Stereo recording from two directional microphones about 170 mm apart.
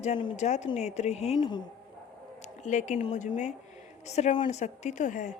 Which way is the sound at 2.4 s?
45° left (ahead or behind).